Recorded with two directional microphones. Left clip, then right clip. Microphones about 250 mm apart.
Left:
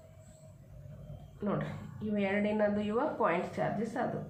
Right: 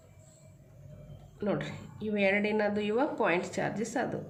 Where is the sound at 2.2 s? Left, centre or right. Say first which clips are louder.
Right 3 dB; right.